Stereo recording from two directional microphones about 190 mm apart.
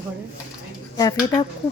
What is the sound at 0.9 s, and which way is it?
Speech, 20° left (ahead or behind).